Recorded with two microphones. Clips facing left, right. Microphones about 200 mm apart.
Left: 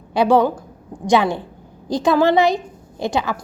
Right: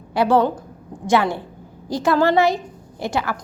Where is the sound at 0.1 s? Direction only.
15° left (ahead or behind).